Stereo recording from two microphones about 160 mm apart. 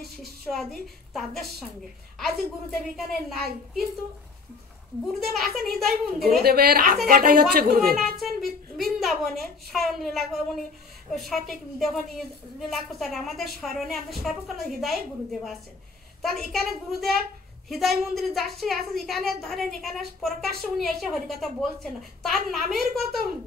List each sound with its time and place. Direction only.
0.0 s a woman's voice: centre (ahead or behind)
5.0 s a woman's voice: centre (ahead or behind)
6.4 s a woman's voice: 75° right (ahead or behind)
8.0 s a woman's voice: centre (ahead or behind)